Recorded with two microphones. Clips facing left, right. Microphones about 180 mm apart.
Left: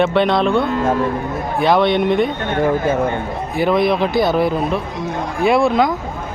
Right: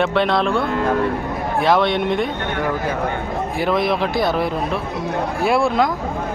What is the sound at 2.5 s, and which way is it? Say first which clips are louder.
Speech: left 7 dB; 25° left (ahead or behind).